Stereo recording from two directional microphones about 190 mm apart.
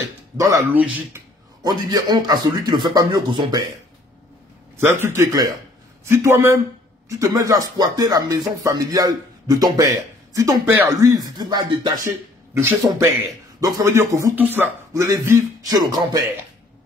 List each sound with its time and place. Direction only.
0.4 s speech: 15° right (ahead or behind)
1.6 s speech: 20° right (ahead or behind)
5.0 s speech: 15° right (ahead or behind)